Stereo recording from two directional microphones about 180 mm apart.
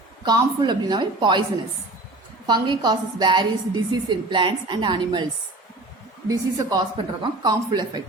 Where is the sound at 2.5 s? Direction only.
25° right (ahead or behind).